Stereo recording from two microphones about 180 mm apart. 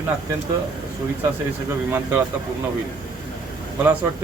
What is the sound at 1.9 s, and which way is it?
Speech, 15° right (ahead or behind).